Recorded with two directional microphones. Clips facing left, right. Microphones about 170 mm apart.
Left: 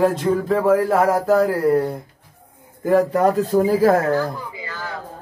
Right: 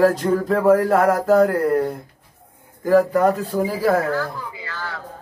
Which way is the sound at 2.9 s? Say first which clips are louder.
Even; 30° left (ahead or behind).